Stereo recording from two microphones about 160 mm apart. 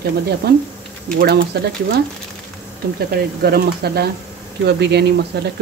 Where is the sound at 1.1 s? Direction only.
85° right.